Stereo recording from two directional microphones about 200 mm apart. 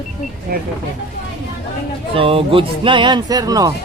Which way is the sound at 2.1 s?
25° right (ahead or behind).